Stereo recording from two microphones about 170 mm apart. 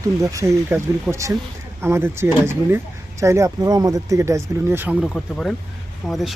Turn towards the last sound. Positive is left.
turn(degrees=0)  # may be behind; listen again after turning